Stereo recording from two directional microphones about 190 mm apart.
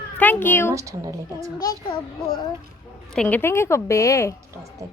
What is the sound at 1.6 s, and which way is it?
Speech, 20° left (ahead or behind).